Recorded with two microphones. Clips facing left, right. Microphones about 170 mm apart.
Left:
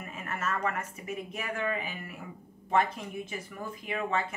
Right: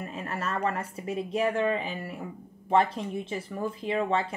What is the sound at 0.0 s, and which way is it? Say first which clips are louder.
A woman's voice: right 3 dB; 30° right (ahead or behind).